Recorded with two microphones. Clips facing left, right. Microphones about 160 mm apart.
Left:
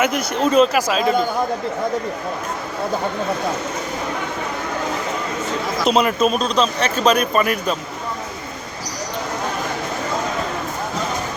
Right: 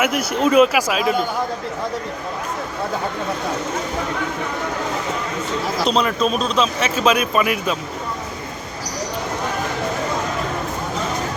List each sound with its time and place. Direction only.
0.0 s speech: 5° right (ahead or behind)
5.8 s speech: 5° left (ahead or behind)